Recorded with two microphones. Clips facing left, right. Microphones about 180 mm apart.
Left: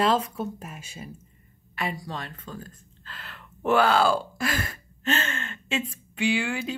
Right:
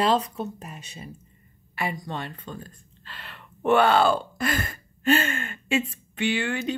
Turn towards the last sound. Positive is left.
turn(degrees=10)  # may be behind; listen again after turning